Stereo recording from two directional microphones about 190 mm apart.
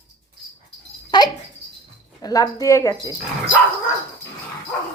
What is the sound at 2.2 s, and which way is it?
Speech, 20° left (ahead or behind).